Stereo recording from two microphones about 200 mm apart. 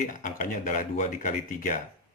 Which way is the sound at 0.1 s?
40° left (ahead or behind).